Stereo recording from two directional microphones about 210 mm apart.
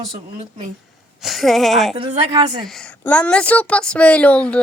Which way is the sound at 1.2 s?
Centre (ahead or behind).